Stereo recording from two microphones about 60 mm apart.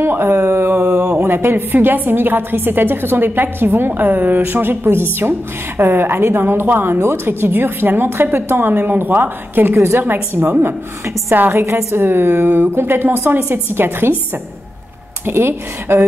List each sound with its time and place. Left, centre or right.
0.0 s speech: right
0.7 s mantra: centre
1.2 s a woman's voice: right
9.8 s a woman's voice: right
11.5 s a woman's voice: right
15.2 s a woman's voice: right